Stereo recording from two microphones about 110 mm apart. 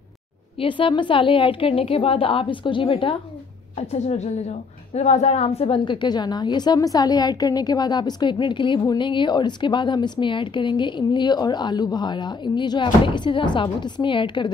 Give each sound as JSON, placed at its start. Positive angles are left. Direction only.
{"t": 0.6, "sound": "a woman's voice", "side_deg": 50}
{"t": 3.9, "sound": "a woman's voice", "side_deg": 90}
{"t": 4.9, "sound": "a woman's voice", "side_deg": 80}
{"t": 5.9, "sound": "a woman's voice", "side_deg": 40}